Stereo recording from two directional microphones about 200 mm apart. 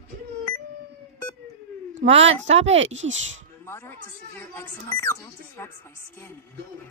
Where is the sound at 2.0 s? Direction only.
30° right (ahead or behind).